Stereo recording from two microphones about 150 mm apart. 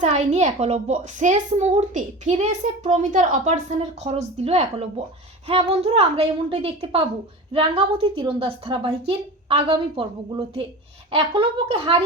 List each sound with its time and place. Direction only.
0.0 s a child's voice: 50° right (ahead or behind)